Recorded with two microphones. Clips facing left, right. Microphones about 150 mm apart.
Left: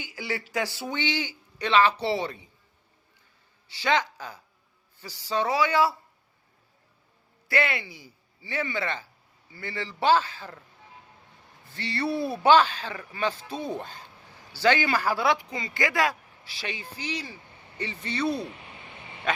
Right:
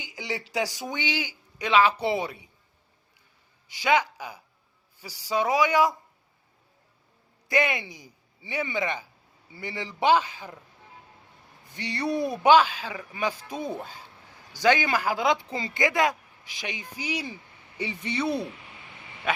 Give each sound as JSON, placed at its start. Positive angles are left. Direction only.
{"t": 0.0, "sound": "a sound", "side_deg": -20}
{"t": 0.5, "sound": "speech", "side_deg": -15}
{"t": 3.7, "sound": "speech", "side_deg": -10}
{"t": 7.4, "sound": "speech", "side_deg": -15}
{"t": 11.7, "sound": "speech", "side_deg": -15}